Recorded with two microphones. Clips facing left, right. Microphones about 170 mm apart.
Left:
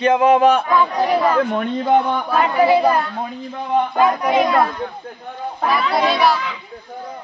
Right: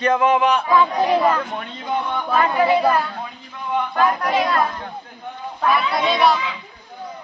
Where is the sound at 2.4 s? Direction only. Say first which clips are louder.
Left 2 dB; 15° left (ahead or behind).